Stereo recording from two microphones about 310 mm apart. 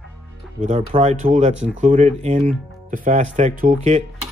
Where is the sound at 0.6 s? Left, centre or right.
Centre.